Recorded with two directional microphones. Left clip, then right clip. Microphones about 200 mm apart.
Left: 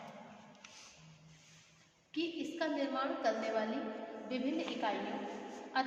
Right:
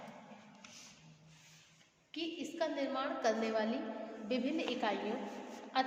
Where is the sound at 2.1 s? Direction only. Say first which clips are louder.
Left 3 dB; 50° right (ahead or behind).